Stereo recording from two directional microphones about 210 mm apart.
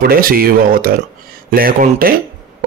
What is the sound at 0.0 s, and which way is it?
Speech, 45° right (ahead or behind).